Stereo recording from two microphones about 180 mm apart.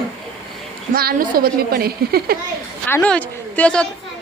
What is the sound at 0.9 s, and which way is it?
A woman's voice, 55° right (ahead or behind).